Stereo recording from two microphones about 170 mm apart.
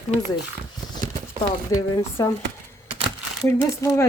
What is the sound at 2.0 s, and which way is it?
Speech, 15° left (ahead or behind).